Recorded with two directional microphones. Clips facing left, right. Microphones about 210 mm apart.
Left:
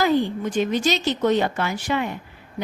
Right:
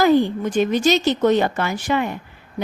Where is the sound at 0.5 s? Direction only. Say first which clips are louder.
Right 5 dB; 50° right (ahead or behind).